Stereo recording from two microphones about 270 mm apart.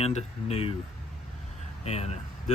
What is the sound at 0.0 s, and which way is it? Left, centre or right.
Speech, left.